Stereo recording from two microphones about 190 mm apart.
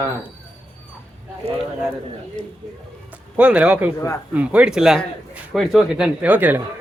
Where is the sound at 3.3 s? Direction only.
5° right (ahead or behind).